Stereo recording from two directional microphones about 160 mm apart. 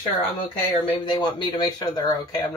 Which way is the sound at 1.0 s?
25° left (ahead or behind).